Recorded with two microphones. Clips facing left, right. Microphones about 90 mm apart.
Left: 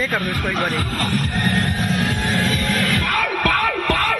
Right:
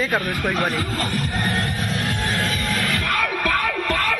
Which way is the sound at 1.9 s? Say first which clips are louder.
Left 3 dB; 45° left (ahead or behind).